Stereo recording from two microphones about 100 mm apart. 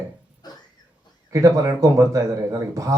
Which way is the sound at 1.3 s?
30° right (ahead or behind).